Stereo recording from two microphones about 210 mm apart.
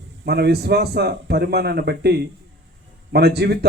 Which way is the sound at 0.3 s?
50° right (ahead or behind).